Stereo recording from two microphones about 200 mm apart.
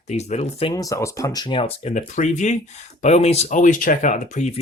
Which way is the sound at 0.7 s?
15° left (ahead or behind).